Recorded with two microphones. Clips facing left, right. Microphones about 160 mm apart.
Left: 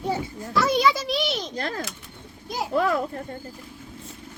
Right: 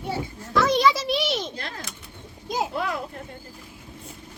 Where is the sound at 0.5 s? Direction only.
5° left (ahead or behind).